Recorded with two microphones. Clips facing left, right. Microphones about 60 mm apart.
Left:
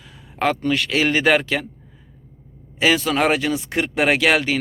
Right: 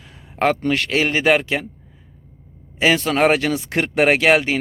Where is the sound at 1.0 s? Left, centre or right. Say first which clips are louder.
Left 1 dB; centre.